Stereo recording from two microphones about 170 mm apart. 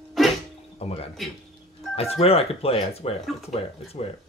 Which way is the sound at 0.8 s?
35° left (ahead or behind).